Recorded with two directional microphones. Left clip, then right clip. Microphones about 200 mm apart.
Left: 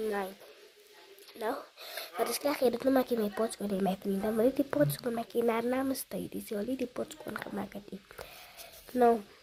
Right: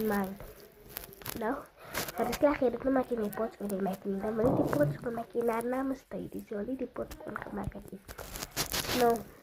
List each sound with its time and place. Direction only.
1.4 s speech: 30° left (ahead or behind)
9.0 s speech: 35° left (ahead or behind)